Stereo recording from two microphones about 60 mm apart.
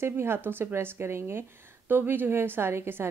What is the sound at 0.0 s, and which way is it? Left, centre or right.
A woman's voice, right.